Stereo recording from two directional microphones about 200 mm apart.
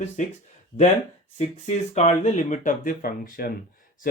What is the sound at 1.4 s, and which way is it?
Speech, 35° left (ahead or behind).